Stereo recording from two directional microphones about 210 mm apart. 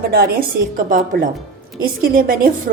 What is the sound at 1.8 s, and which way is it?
Speech, 45° right (ahead or behind).